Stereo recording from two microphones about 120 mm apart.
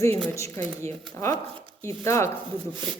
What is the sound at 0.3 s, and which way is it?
Speech, 25° left (ahead or behind).